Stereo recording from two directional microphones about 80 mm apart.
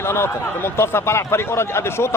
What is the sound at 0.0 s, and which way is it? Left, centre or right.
Speech, left.